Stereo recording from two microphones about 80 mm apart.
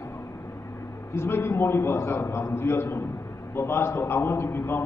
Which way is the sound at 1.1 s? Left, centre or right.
Left.